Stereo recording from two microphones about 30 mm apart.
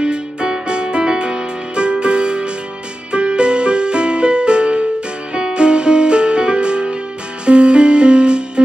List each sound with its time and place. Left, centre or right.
0.0 s music: right